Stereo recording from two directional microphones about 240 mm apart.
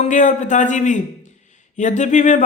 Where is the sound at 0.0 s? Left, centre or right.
Left.